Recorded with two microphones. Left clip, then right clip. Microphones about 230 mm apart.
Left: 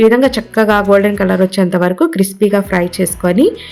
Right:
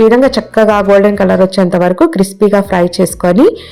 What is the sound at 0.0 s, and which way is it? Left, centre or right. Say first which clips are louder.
Speech: right 2 dB; centre.